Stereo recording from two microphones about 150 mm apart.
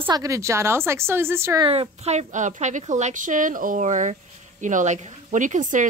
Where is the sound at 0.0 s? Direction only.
25° right (ahead or behind).